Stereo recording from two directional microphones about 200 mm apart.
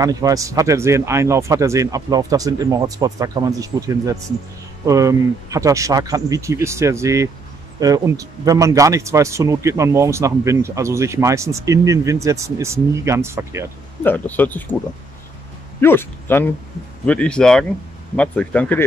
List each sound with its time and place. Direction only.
0.0 s speech: 15° right (ahead or behind)
14.0 s speech: 10° left (ahead or behind)
15.8 s speech: 10° left (ahead or behind)